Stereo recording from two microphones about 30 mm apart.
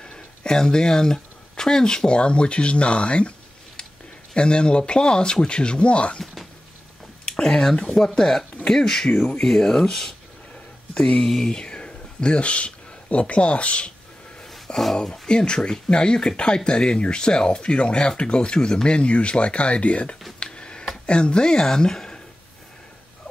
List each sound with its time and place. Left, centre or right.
0.4 s speech: left
2.1 s speech: left
7.4 s speech: centre
11.1 s speech: centre
11.5 s speech: left
14.7 s speech: left
18.9 s speech: left
20.5 s a sound: left
21.0 s speech: left
21.5 s speech: centre